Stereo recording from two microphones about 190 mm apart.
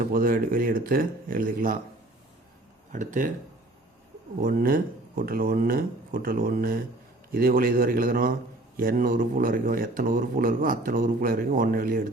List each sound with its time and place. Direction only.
0.0 s a man's voice: 50° right (ahead or behind)
2.9 s a man's voice: 40° right (ahead or behind)
4.4 s a man's voice: 45° right (ahead or behind)